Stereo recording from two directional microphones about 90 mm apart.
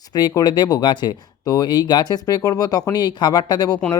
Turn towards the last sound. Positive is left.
turn(degrees=50)  # may be behind; listen again after turning